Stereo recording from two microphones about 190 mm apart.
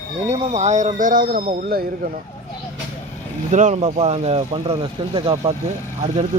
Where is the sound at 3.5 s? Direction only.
40° right (ahead or behind).